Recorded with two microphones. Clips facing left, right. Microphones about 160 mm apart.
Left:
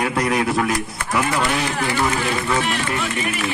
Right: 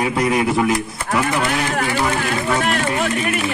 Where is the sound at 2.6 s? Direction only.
50° right (ahead or behind).